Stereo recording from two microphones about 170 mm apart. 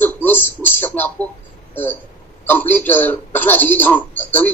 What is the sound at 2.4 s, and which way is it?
Speech, 10° left (ahead or behind).